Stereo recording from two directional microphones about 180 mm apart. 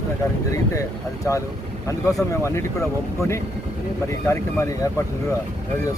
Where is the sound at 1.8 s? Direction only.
15° left (ahead or behind).